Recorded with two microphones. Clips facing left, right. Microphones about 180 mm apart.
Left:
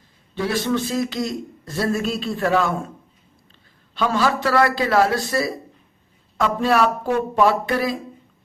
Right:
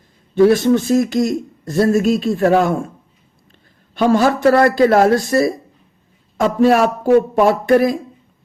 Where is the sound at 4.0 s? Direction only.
50° right (ahead or behind).